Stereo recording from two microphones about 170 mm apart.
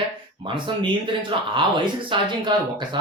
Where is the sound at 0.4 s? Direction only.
30° right (ahead or behind).